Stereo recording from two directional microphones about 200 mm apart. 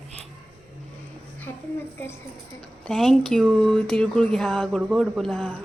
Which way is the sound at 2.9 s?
Centre (ahead or behind).